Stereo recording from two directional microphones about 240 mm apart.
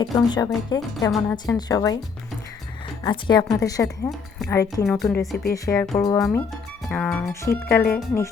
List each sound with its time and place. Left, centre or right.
0.0 s speech: centre
3.0 s speech: centre
5.6 s speech: centre
6.8 s speech: centre